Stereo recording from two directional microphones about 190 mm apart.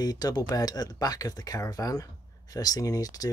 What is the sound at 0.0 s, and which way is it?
Speech, 20° left (ahead or behind).